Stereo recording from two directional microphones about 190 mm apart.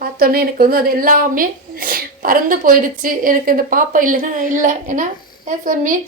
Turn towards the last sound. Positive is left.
turn(degrees=-45)  # may be behind; listen again after turning